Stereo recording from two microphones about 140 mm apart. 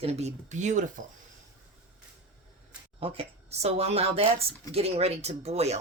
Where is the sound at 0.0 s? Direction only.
50° right (ahead or behind).